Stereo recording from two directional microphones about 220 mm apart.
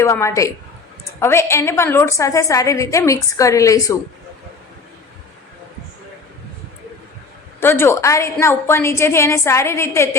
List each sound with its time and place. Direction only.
0.0 s a woman's voice: 15° left (ahead or behind)
7.6 s a woman's voice: 10° left (ahead or behind)